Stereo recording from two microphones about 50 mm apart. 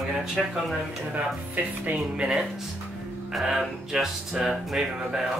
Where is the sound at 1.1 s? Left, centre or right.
Right.